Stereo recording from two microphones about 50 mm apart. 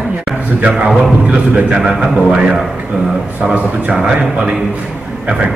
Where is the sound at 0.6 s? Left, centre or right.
Right.